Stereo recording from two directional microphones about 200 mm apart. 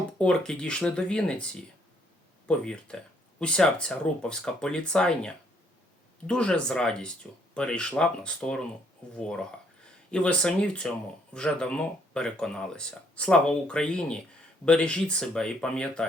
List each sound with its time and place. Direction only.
0.2 s speech: 5° left (ahead or behind)
2.5 s speech: 5° left (ahead or behind)